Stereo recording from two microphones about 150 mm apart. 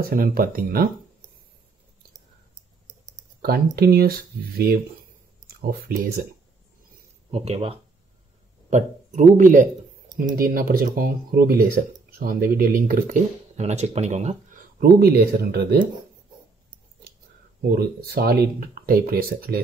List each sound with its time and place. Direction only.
0.0 s speech: 75° right (ahead or behind)
3.4 s speech: 90° right
7.2 s speech: 40° right (ahead or behind)
8.6 s a man's voice: 55° right (ahead or behind)
10.1 s speech: 70° right (ahead or behind)
13.6 s speech: 45° right (ahead or behind); by 15.9 s 90° right
17.6 s speech: 90° right